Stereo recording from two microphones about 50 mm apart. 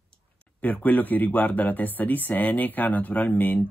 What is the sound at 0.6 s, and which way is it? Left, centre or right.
Speech, left.